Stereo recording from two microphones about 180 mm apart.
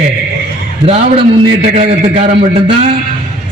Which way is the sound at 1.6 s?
35° right (ahead or behind).